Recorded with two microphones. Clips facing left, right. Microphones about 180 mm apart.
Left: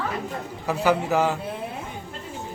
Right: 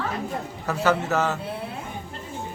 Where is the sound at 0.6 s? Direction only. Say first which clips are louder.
Left 1 dB; 15° left (ahead or behind).